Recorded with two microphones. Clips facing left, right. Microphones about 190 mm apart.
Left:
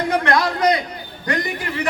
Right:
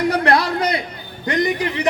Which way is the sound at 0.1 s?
35° right (ahead or behind).